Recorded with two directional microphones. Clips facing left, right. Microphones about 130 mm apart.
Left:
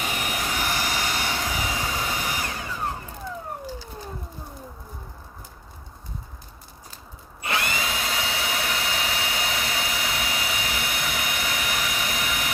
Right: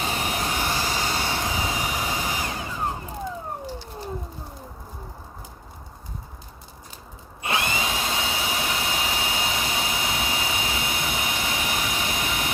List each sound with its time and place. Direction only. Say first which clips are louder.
0.0 s vehicle: right 2 dB; 30° right (ahead or behind)
7.4 s tools: right 1 dB; 20° right (ahead or behind)